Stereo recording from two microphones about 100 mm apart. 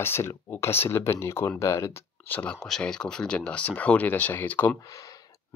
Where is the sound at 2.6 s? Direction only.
5° left (ahead or behind).